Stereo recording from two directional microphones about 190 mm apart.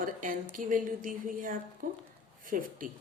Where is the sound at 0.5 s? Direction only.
45° right (ahead or behind).